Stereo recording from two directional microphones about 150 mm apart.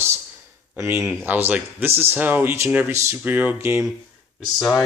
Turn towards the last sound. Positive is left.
turn(degrees=0)  # may be behind; listen again after turning